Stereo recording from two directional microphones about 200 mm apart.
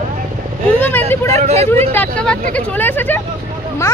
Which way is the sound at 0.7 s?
10° left (ahead or behind).